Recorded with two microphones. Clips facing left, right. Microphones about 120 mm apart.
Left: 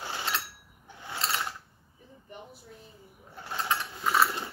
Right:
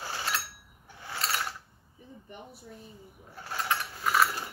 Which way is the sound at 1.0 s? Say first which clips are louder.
Left 1 dB; 20° left (ahead or behind).